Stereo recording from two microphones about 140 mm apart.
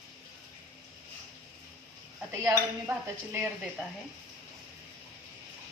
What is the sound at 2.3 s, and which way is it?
Cutlery, 20° right (ahead or behind).